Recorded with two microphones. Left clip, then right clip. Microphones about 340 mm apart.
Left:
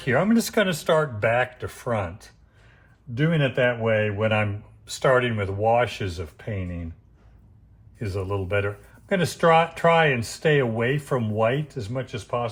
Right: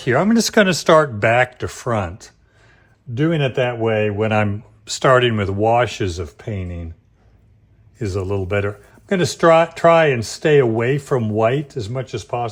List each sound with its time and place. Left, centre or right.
0.0 s speech: right
7.9 s speech: right